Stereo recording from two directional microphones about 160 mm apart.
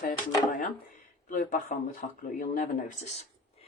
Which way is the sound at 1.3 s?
55° left (ahead or behind).